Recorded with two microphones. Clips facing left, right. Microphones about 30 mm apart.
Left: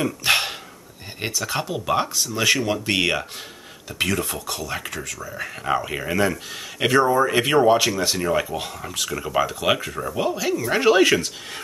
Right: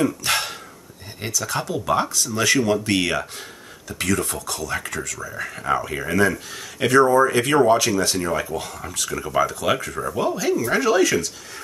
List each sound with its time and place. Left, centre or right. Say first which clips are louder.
0.0 s a sound: left 1 dB; left
1.2 s speech: even; centre
6.8 s speech: right 2 dB; left
8.5 s speech: even; left
8.8 s speech: even; centre
10.8 s speech: left 5 dB; left